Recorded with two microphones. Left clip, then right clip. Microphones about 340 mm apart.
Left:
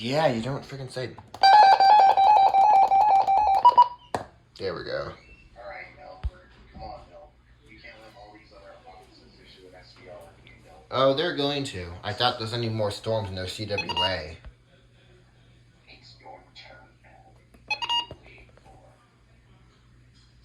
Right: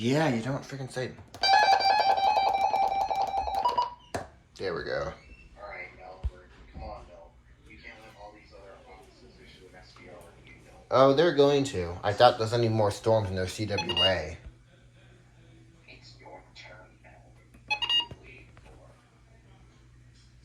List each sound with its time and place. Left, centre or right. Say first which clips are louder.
0.0 s music: left 3 dB; centre
4.5 s speech: left 1 dB; centre
10.4 s speech: left 1 dB; centre
17.7 s a sound: even; centre